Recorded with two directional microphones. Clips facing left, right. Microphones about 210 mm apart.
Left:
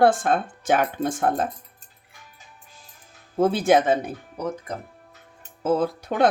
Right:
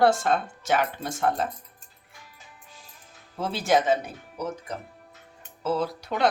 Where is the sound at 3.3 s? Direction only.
50° left (ahead or behind).